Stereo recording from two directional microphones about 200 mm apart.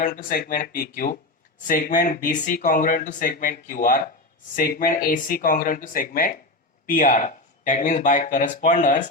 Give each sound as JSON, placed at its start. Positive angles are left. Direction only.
{"t": 0.0, "sound": "speech", "side_deg": 45}